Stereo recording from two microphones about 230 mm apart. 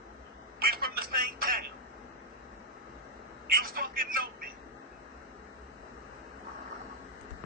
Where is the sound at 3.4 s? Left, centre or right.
Right.